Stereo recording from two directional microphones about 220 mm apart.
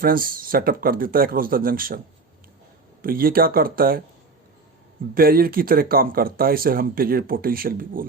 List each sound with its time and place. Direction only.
0.0 s speech: 40° right (ahead or behind)
3.0 s speech: 40° right (ahead or behind)
5.1 s speech: 40° right (ahead or behind)